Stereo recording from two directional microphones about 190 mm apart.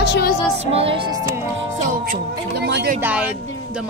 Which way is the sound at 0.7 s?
30° right (ahead or behind).